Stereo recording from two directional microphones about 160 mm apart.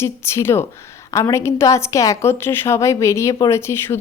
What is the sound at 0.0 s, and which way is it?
A woman's voice, 15° left (ahead or behind).